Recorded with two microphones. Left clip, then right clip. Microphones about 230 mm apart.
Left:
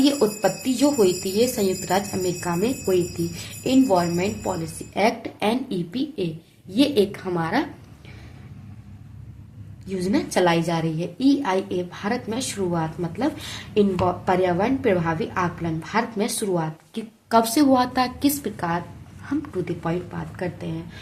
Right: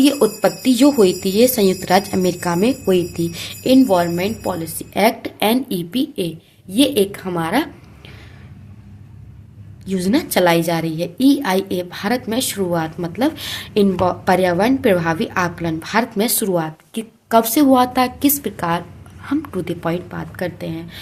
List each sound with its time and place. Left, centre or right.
0.0 s a woman's voice: right
9.8 s a woman's voice: right